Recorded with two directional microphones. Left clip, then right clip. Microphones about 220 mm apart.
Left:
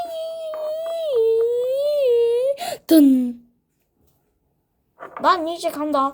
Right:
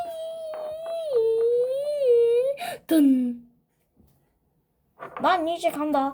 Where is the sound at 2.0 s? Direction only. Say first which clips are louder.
Even; 45° left (ahead or behind).